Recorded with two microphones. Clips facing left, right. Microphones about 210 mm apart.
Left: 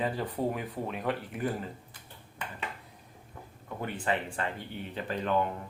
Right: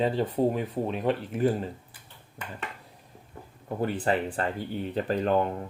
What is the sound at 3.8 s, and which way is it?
Speech, 35° right (ahead or behind).